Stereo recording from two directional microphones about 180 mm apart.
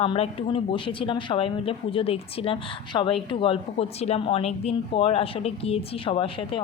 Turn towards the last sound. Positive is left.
turn(degrees=30)  # may be behind; listen again after turning